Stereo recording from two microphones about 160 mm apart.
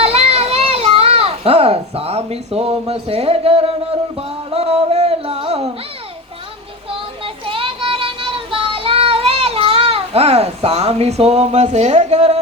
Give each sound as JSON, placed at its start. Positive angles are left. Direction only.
{"t": 0.0, "sound": "a child's voice", "side_deg": -40}
{"t": 4.2, "sound": "music", "side_deg": -40}
{"t": 7.4, "sound": "child singing", "side_deg": -35}